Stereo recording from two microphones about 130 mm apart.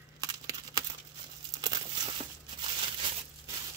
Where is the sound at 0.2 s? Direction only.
30° right (ahead or behind).